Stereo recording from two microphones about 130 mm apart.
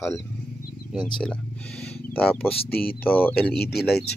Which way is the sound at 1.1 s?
5° left (ahead or behind).